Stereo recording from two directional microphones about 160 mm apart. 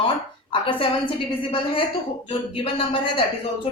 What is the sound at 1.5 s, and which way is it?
A woman's voice, 35° left (ahead or behind).